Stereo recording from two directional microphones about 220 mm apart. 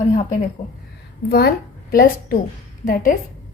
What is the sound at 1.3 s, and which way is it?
A woman's voice, 45° left (ahead or behind).